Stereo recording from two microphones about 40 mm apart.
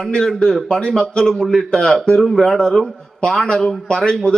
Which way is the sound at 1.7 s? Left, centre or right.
Centre.